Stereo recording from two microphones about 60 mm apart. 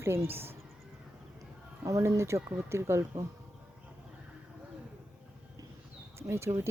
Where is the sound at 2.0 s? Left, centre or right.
Right.